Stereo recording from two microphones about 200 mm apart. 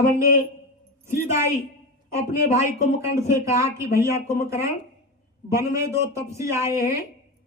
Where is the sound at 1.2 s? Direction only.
15° right (ahead or behind).